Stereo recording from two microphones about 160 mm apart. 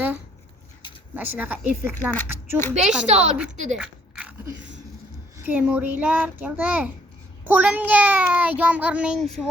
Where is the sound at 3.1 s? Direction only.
45° right (ahead or behind).